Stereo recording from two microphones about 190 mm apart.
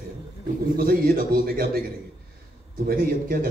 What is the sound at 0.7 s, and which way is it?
Speech, 50° right (ahead or behind).